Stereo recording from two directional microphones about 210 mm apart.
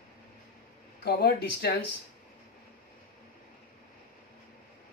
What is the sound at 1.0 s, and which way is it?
Speech, 50° left (ahead or behind).